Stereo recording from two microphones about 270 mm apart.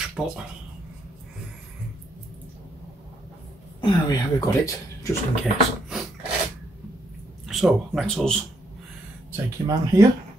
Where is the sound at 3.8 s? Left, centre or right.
Centre.